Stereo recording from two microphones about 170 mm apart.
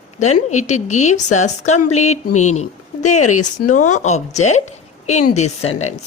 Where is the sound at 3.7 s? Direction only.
45° left (ahead or behind).